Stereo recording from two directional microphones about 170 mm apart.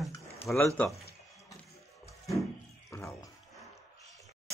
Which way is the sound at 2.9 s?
15° left (ahead or behind).